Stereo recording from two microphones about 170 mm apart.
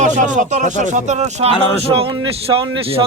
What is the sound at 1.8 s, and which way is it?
A man's voice, 35° right (ahead or behind).